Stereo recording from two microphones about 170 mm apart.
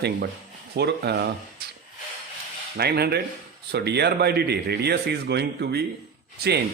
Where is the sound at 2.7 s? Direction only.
70° right (ahead or behind).